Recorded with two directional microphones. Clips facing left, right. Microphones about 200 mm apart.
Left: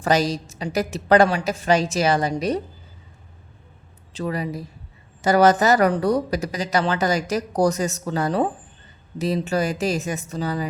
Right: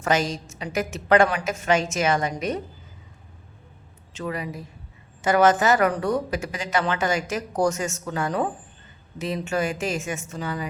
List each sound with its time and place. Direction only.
0.0 s speech: 35° left (ahead or behind)
4.1 s speech: 35° left (ahead or behind)